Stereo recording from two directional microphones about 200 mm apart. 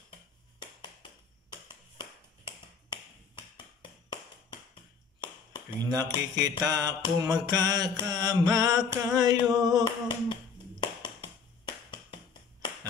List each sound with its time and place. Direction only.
1.5 s tap: 20° left (ahead or behind)
5.8 s music: 20° right (ahead or behind)
10.0 s finger snapping: 20° left (ahead or behind)